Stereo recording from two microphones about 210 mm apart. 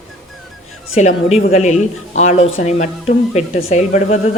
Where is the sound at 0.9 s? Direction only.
35° left (ahead or behind).